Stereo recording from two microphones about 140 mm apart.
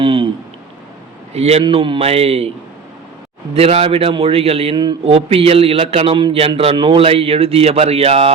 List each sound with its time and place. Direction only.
0.0 s a sound: 40° right (ahead or behind)
1.3 s a man's voice: 50° right (ahead or behind)
1.6 s a man's voice: 35° right (ahead or behind)
3.5 s a man's voice: 45° right (ahead or behind)